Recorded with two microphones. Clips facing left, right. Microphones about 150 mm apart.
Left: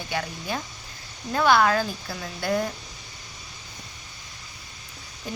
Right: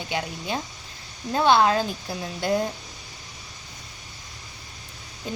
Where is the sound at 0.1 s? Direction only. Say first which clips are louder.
Right 1 dB; 20° right (ahead or behind).